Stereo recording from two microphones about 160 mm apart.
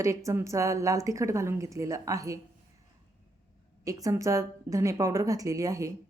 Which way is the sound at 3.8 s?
20° right (ahead or behind).